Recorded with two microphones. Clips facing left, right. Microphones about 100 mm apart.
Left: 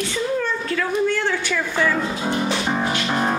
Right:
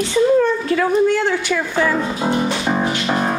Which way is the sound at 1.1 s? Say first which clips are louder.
Right 4 dB; 15° right (ahead or behind).